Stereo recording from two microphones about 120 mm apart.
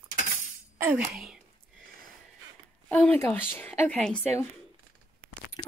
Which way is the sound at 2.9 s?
15° left (ahead or behind).